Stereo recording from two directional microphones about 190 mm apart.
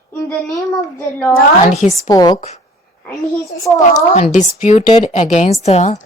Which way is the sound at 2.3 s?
40° left (ahead or behind).